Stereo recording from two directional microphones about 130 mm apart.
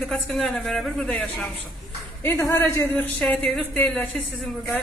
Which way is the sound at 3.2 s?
5° left (ahead or behind).